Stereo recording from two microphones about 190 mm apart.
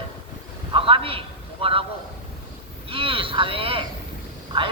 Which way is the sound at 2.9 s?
30° right (ahead or behind).